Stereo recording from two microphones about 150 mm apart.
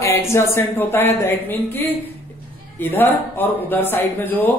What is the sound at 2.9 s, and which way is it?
Speech, 15° left (ahead or behind).